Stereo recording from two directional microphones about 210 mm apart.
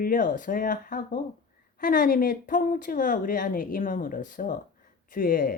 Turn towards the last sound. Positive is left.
turn(degrees=40)  # may be behind; listen again after turning